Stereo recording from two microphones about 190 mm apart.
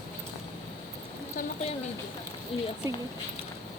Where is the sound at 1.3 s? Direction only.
35° left (ahead or behind).